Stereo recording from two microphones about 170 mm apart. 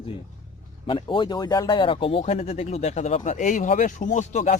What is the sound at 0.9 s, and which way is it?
Speech, 30° left (ahead or behind).